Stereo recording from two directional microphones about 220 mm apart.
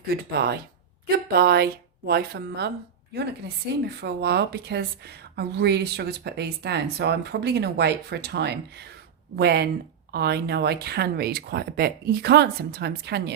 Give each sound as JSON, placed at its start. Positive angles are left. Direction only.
{"t": 0.1, "sound": "speech", "side_deg": -45}
{"t": 3.8, "sound": "speech", "side_deg": -50}